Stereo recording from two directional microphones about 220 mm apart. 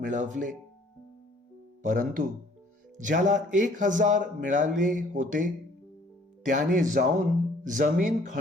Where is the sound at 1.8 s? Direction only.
40° right (ahead or behind).